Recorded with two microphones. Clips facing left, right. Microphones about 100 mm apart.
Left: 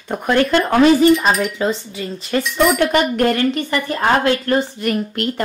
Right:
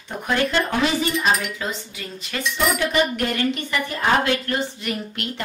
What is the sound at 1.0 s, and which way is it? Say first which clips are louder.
Speech: left 8 dB; 45° left (ahead or behind).